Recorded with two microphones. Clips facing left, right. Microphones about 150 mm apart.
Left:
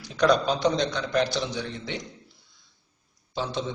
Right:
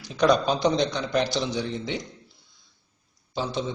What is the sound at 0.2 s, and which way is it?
A man's voice, 20° right (ahead or behind).